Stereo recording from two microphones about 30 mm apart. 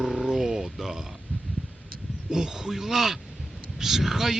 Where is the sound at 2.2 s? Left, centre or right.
Centre.